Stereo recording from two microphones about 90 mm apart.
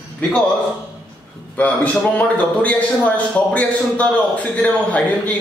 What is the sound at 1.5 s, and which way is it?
A man's voice, 15° left (ahead or behind).